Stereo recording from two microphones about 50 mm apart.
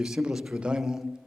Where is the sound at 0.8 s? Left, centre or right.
Centre.